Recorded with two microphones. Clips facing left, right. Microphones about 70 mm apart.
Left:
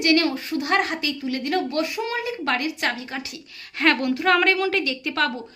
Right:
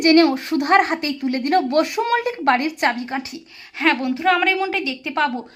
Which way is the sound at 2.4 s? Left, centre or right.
Right.